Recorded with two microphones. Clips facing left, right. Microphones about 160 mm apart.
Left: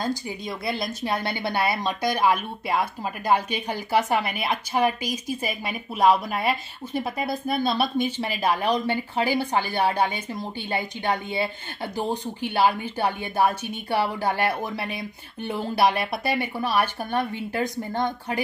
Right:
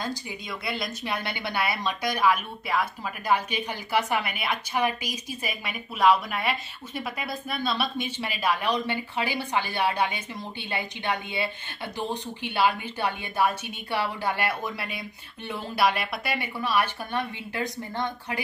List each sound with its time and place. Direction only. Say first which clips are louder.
0.0 s speech: left 5 dB; 35° left (ahead or behind)